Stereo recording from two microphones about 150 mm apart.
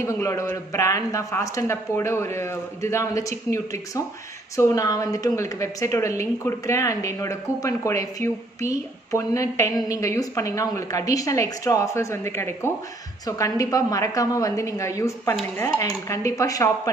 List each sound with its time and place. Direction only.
0.0 s a woman's voice: 20° left (ahead or behind)